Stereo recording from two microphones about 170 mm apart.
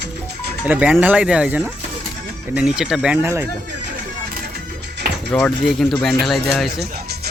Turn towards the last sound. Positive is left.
turn(degrees=0)  # may be behind; listen again after turning